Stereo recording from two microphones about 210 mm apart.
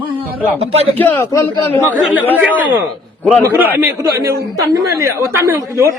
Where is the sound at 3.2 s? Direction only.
5° left (ahead or behind).